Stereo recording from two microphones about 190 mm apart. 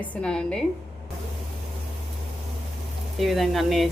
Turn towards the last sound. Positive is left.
turn(degrees=0)  # may be behind; listen again after turning